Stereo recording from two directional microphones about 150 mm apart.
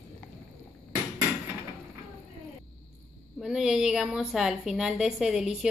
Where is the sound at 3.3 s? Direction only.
5° right (ahead or behind).